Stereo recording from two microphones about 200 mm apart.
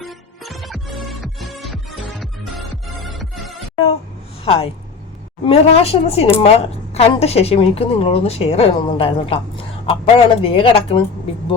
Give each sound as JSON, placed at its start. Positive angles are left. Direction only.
{"t": 0.0, "sound": "music", "side_deg": 0}
{"t": 4.4, "sound": "a woman's voice", "side_deg": 30}